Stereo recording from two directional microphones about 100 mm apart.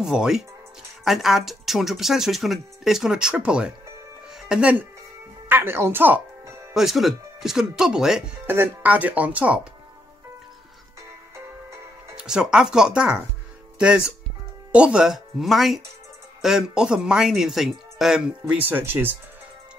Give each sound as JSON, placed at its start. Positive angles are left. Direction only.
{"t": 0.0, "sound": "speech", "side_deg": -5}
{"t": 5.5, "sound": "speech", "side_deg": -25}
{"t": 6.7, "sound": "speech", "side_deg": -5}
{"t": 8.5, "sound": "speech", "side_deg": -20}
{"t": 12.2, "sound": "speech", "side_deg": -5}
{"t": 18.5, "sound": "speech", "side_deg": -20}